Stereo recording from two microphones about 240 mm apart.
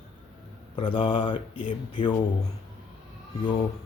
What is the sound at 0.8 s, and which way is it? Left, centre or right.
Speech, left.